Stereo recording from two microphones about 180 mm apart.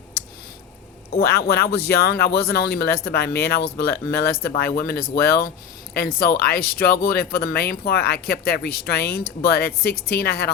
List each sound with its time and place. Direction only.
1.1 s speech: 60° left (ahead or behind)